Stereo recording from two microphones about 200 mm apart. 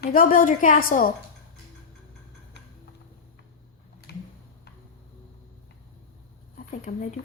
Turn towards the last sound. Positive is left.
turn(degrees=40)  # may be behind; listen again after turning